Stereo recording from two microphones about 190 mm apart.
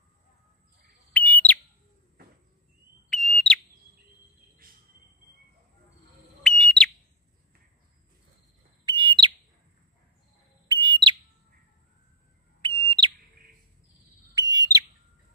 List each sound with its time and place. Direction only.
1.1 s bird: 10° left (ahead or behind)
3.1 s fire alarm: centre (ahead or behind)
6.4 s bird: 5° left (ahead or behind)
8.8 s bird: 25° right (ahead or behind)
10.7 s bird: 25° right (ahead or behind)
12.6 s bird: 25° right (ahead or behind)
14.3 s bird: 20° right (ahead or behind)